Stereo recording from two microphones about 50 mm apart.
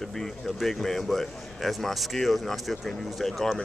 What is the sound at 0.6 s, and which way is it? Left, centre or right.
Speech, centre.